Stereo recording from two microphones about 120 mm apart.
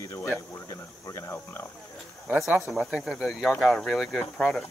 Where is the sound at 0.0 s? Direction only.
25° left (ahead or behind).